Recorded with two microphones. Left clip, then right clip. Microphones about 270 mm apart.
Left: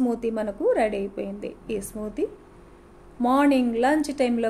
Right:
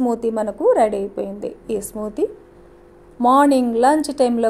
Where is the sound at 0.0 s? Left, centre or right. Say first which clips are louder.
Right 6 dB; centre.